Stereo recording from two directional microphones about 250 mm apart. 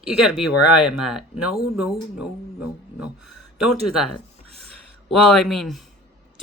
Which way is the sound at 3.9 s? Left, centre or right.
Left.